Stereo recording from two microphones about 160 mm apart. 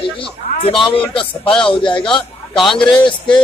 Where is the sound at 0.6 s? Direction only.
35° left (ahead or behind).